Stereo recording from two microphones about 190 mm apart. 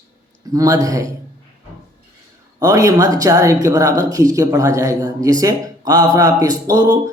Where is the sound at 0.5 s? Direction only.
20° right (ahead or behind).